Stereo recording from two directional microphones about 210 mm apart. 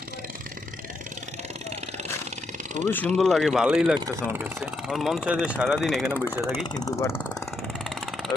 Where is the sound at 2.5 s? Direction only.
35° right (ahead or behind).